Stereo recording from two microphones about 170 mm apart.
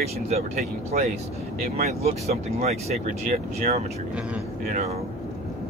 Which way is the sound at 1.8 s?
40° right (ahead or behind).